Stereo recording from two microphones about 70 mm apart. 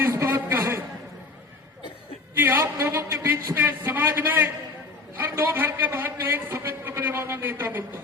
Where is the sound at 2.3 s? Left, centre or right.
Right.